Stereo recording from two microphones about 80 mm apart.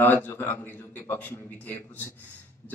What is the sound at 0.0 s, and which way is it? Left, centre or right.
A man's voice, left.